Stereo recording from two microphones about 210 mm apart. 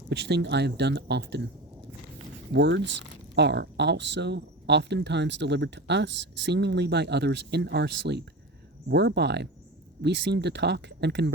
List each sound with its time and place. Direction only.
0.1 s speech: 55° right (ahead or behind)
2.5 s speech: 55° right (ahead or behind)